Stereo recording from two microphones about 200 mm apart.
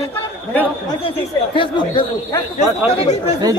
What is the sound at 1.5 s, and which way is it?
Speech, 25° left (ahead or behind).